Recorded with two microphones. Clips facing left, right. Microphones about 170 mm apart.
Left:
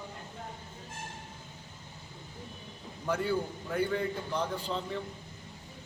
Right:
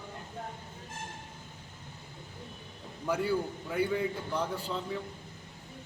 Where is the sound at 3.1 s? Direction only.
10° right (ahead or behind).